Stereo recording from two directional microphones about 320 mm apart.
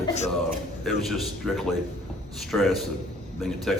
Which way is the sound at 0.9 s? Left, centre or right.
Centre.